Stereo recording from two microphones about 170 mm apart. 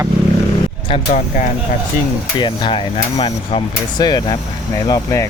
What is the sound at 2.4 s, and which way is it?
Speech, 30° left (ahead or behind).